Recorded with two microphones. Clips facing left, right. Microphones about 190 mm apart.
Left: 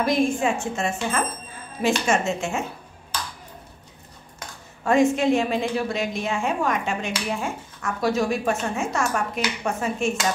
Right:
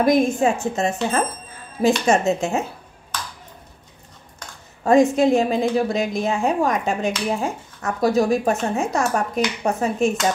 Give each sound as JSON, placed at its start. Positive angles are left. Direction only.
{"t": 0.0, "sound": "speech", "side_deg": -40}
{"t": 4.8, "sound": "speech", "side_deg": -40}